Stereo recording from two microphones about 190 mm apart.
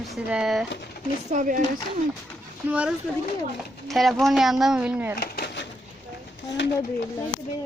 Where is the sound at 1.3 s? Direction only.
45° right (ahead or behind).